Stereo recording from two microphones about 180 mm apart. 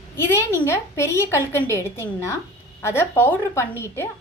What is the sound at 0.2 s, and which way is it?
A woman's voice, 15° left (ahead or behind).